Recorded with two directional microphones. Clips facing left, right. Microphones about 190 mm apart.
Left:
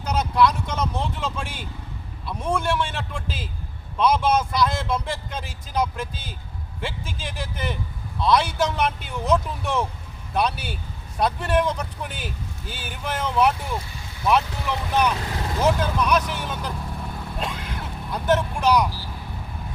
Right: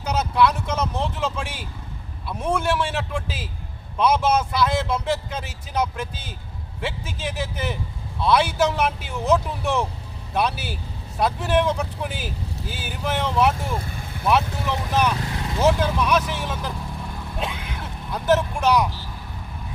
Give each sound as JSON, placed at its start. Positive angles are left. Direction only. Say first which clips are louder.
{"t": 0.0, "sound": "vehicle", "louder": "even", "side_deg": -5}
{"t": 2.2, "sound": "speech", "louder": "right 1 dB", "side_deg": -5}
{"t": 13.8, "sound": "vehicle", "louder": "right 5 dB", "side_deg": -55}
{"t": 14.3, "sound": "speech", "louder": "even", "side_deg": 0}
{"t": 17.3, "sound": "vehicle", "louder": "right 1 dB", "side_deg": 0}